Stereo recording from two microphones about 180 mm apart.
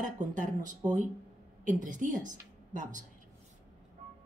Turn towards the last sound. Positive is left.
turn(degrees=-45)  # may be behind; listen again after turning